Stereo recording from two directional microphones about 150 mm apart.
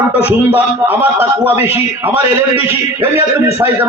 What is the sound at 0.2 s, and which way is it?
A man's voice, 15° right (ahead or behind).